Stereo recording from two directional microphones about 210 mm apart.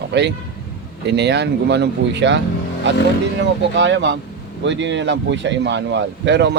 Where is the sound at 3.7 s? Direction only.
60° right (ahead or behind).